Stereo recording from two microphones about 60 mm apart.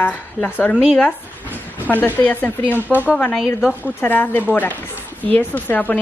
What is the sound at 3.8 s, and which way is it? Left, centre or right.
A woman's voice, left.